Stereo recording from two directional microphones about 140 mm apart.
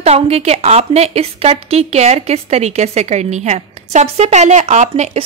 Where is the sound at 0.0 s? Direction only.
50° right (ahead or behind).